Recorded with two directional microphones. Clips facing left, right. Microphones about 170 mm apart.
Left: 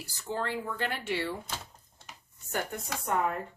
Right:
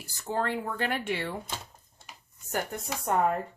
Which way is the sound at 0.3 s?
50° right (ahead or behind).